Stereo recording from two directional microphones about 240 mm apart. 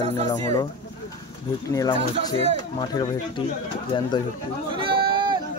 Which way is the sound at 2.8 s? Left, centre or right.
Centre.